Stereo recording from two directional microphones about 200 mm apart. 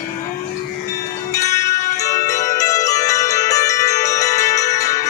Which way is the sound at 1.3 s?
15° left (ahead or behind).